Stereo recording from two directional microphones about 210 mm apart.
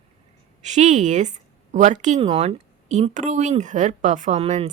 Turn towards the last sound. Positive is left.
turn(degrees=-30)  # may be behind; listen again after turning